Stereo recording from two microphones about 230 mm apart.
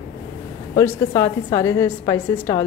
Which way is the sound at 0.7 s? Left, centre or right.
Centre.